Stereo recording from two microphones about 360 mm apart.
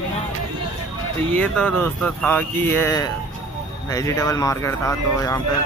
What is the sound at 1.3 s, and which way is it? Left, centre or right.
Speech, centre.